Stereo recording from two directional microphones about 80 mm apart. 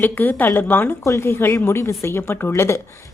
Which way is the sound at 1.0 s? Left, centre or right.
Left.